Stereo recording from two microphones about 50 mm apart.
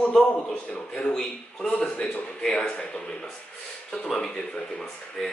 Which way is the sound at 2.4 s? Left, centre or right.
Centre.